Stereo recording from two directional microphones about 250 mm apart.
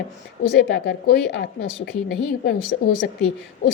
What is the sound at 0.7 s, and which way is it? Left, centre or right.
A woman's voice, left.